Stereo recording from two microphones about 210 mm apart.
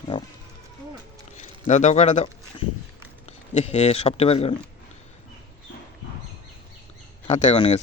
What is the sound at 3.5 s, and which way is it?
Speech, 30° left (ahead or behind).